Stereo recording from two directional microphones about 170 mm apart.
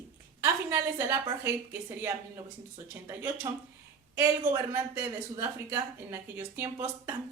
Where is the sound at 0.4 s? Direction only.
15° right (ahead or behind).